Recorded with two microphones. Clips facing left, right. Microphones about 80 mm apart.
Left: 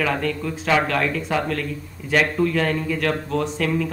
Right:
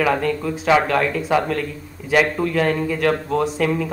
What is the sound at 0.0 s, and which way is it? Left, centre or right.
Speech, centre.